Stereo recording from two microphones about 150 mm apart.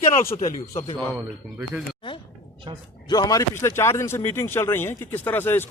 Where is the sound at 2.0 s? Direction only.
35° left (ahead or behind).